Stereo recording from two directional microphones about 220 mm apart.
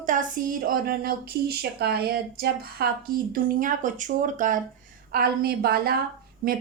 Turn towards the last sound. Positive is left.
turn(degrees=-40)  # may be behind; listen again after turning